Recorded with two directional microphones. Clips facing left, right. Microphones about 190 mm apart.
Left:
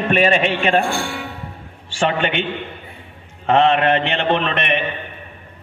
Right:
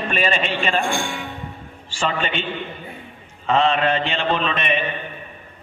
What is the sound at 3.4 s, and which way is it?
A man's voice, 65° left (ahead or behind).